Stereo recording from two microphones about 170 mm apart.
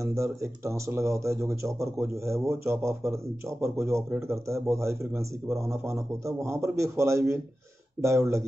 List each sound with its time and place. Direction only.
0.0 s speech: 15° right (ahead or behind)